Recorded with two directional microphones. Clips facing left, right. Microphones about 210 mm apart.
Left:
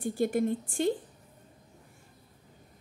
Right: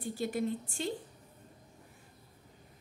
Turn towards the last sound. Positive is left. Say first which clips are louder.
# left 7 dB
turn(degrees=50)  # may be behind; listen again after turning